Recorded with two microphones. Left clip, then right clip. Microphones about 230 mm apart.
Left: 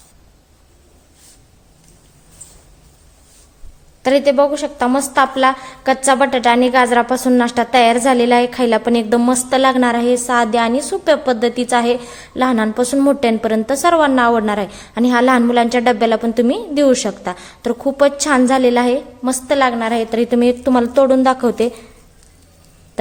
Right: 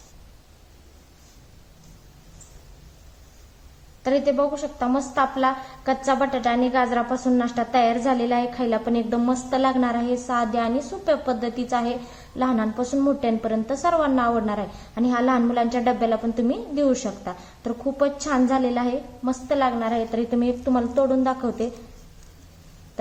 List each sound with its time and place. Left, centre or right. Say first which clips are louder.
4.0 s a woman's voice: left 9 dB; left